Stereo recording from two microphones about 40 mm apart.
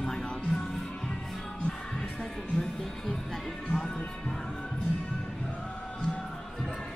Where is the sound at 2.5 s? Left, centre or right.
Centre.